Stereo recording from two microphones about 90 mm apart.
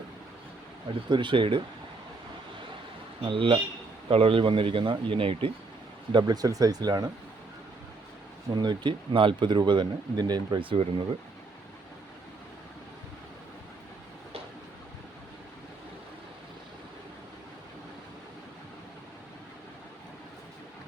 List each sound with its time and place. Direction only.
0.9 s speech: 65° right (ahead or behind)
3.2 s speech: 70° right (ahead or behind)
4.1 s speech: 85° right
6.1 s speech: 60° right (ahead or behind)
6.3 s speech: 40° right (ahead or behind)
8.5 s speech: 55° right (ahead or behind)
10.6 s speech: 75° right (ahead or behind)